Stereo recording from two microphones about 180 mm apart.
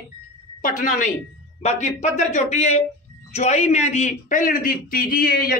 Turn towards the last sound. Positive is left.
turn(degrees=55)  # may be behind; listen again after turning